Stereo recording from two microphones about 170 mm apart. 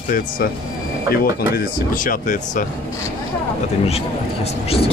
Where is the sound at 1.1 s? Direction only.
65° left (ahead or behind).